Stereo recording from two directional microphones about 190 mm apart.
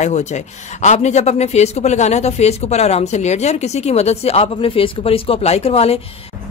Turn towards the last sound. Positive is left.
turn(degrees=30)  # may be behind; listen again after turning